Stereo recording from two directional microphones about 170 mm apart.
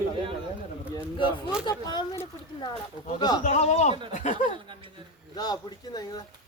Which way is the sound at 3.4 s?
40° left (ahead or behind).